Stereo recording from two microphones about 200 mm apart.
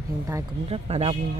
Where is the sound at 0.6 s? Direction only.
30° right (ahead or behind).